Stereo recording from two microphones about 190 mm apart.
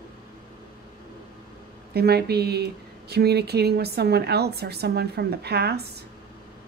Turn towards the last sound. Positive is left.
turn(degrees=-60)  # may be behind; listen again after turning